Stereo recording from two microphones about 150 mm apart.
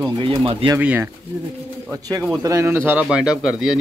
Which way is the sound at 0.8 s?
10° right (ahead or behind).